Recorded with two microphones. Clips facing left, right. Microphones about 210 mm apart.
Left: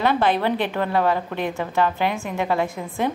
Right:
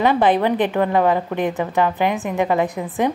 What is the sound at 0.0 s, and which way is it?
A woman's voice, 15° right (ahead or behind).